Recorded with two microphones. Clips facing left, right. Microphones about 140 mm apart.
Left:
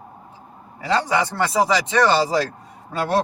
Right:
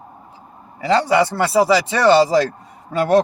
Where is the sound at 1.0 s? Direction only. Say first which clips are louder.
Right 5 dB; 10° right (ahead or behind).